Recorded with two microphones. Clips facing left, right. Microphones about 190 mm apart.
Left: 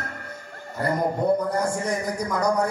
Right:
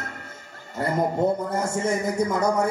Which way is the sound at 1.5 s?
25° right (ahead or behind).